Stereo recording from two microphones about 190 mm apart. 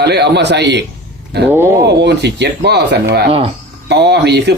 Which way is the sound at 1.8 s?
65° right (ahead or behind).